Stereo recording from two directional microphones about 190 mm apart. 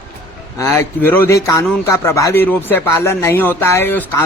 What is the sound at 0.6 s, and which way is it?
A man's voice, 10° left (ahead or behind).